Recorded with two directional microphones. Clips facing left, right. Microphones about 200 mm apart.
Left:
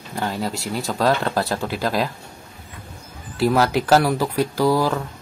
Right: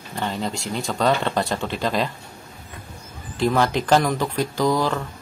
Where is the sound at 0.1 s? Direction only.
5° left (ahead or behind).